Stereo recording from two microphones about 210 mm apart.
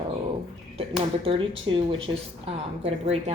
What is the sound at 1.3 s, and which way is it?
A woman's voice, 25° right (ahead or behind).